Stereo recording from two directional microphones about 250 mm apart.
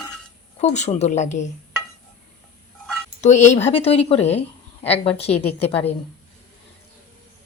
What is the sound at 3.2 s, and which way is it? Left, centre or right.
A woman's voice, left.